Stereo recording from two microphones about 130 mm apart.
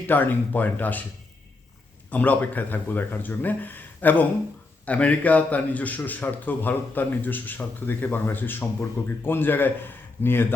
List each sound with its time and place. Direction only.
0.1 s a man's voice: 15° left (ahead or behind)
2.0 s a man's voice: 10° left (ahead or behind)